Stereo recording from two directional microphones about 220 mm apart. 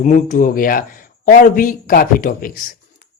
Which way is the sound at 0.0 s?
35° left (ahead or behind).